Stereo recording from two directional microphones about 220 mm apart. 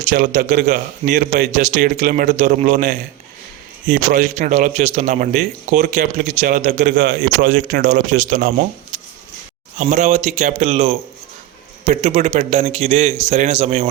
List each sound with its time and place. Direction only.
0.1 s a man's voice: 35° right (ahead or behind)
3.9 s a man's voice: 35° right (ahead or behind)
9.7 s a man's voice: 35° right (ahead or behind)